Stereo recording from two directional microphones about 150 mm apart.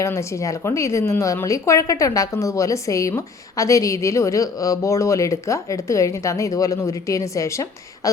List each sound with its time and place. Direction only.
0.0 s speech: 20° left (ahead or behind)